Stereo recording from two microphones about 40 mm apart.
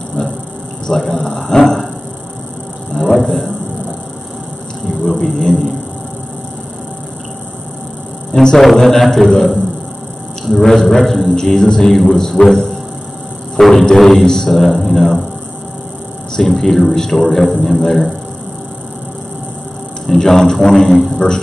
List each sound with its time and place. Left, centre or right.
0.8 s a man's voice: centre
1.4 s a sound: centre
3.0 s a sound: centre
5.0 s a sound: centre
8.3 s a sound: centre
8.8 s a man's voice: centre
10.5 s a man's voice: centre
11.3 s a man's voice: centre
13.6 s music: centre
13.9 s a man's voice: centre
16.3 s a man's voice: centre
20.1 s a man's voice: centre